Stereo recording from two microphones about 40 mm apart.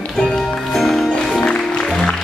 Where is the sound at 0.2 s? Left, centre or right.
Centre.